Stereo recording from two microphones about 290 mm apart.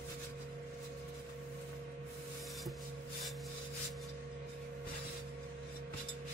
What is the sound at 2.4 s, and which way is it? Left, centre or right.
Rub, centre.